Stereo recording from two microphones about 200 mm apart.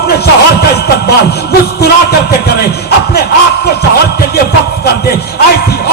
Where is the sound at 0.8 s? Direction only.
55° left (ahead or behind).